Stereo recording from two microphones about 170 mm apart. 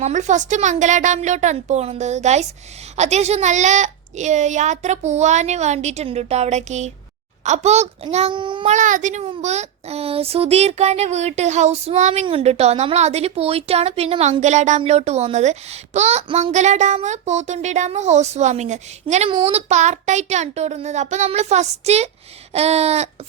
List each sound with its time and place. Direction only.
0.0 s a woman's voice: 45° right (ahead or behind); by 8.6 s 30° right (ahead or behind)
8.6 s a woman's voice: 45° right (ahead or behind)
9.2 s a woman's voice: 35° right (ahead or behind)